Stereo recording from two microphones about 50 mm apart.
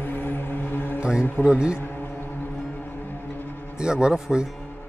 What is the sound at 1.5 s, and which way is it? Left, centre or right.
Speech, centre.